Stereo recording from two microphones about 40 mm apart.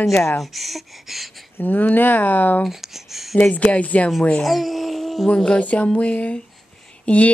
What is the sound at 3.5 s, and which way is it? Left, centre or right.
Speech, left.